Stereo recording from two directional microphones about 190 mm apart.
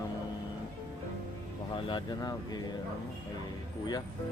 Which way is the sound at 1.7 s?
25° left (ahead or behind).